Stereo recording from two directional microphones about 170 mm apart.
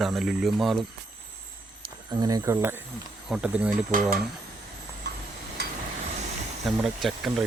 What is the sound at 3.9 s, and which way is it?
Speech, 55° right (ahead or behind).